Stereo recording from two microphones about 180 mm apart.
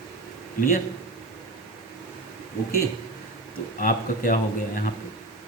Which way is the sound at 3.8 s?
50° left (ahead or behind).